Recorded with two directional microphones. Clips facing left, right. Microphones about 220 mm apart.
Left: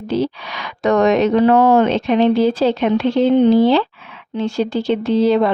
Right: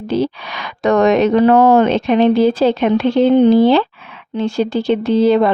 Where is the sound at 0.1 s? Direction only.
55° right (ahead or behind).